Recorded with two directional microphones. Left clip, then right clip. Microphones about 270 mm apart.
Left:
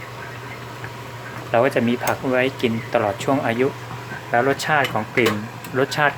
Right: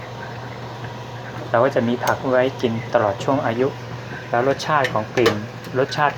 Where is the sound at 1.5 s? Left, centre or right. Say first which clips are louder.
Even; centre.